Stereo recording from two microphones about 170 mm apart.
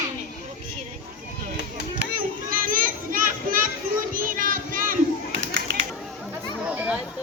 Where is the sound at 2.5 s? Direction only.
55° right (ahead or behind).